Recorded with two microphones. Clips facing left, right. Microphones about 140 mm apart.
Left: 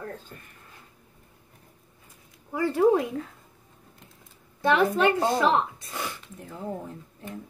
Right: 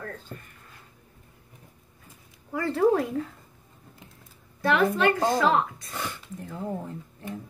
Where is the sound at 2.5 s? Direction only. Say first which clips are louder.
Left 1 dB; 15° left (ahead or behind).